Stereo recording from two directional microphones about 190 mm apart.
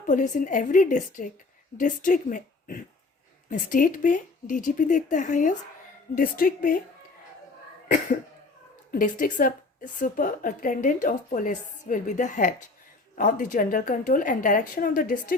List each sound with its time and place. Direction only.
0.0 s a woman's voice: 45° left (ahead or behind)
8.9 s a woman's voice: 45° left (ahead or behind)